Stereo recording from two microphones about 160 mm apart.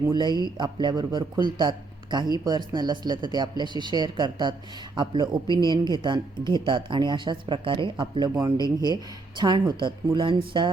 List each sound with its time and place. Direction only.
0.1 s speech: 25° right (ahead or behind)